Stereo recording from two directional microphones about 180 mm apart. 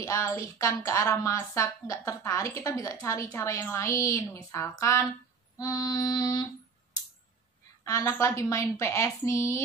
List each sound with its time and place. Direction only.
0.0 s speech: 15° left (ahead or behind)
5.6 s music: 20° left (ahead or behind)
7.8 s speech: 15° left (ahead or behind)